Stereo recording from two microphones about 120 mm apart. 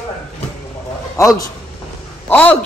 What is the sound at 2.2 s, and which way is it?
Speech, 15° left (ahead or behind).